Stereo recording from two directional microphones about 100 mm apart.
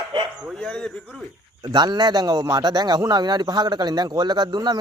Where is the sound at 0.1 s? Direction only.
50° right (ahead or behind).